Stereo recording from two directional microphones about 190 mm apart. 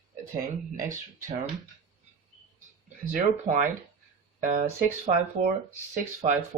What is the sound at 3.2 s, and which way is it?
Speech, 40° right (ahead or behind).